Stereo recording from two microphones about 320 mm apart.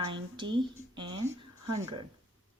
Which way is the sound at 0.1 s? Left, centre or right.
Centre.